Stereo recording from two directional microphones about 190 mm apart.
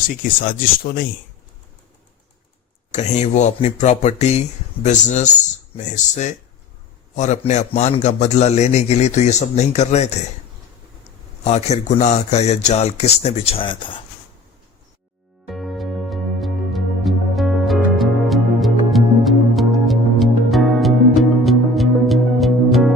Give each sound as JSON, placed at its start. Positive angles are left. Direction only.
{"t": 0.1, "sound": "speech", "side_deg": 50}
{"t": 2.9, "sound": "a man's voice", "side_deg": 40}
{"t": 11.4, "sound": "a man's voice", "side_deg": 35}
{"t": 15.4, "sound": "music", "side_deg": 0}